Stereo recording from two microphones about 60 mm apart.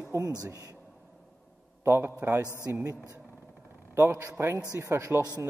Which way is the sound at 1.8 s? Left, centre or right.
Right.